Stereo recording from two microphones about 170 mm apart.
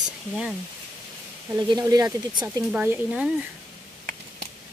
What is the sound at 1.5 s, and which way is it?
Speech, 20° right (ahead or behind).